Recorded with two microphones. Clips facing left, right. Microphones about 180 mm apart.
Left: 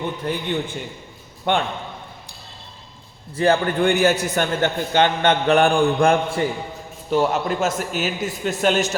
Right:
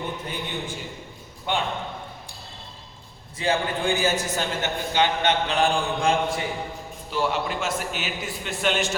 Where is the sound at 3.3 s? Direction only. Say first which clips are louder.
Left 7 dB; 65° left (ahead or behind).